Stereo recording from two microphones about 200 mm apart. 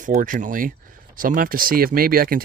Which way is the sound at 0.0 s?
40° right (ahead or behind).